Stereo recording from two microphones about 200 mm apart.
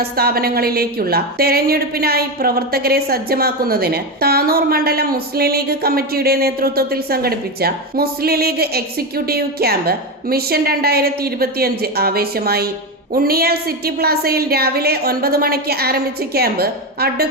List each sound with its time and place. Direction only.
0.0 s a woman's voice: 50° right (ahead or behind)